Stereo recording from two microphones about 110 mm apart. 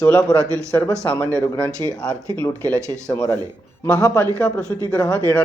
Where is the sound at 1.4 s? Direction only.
15° left (ahead or behind).